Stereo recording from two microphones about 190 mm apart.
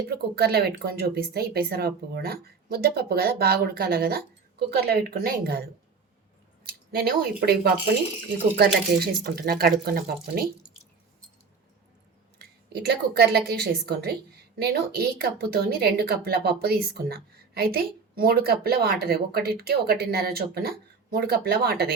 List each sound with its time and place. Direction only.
0.1 s speech: 55° right (ahead or behind)
6.7 s speech: 55° right (ahead or behind)
12.4 s a woman's voice: 60° right (ahead or behind)